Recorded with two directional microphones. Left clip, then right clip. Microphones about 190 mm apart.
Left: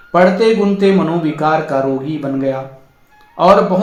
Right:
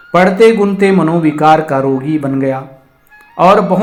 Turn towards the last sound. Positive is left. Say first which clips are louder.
# right 2 dB
turn(degrees=-40)  # may be behind; listen again after turning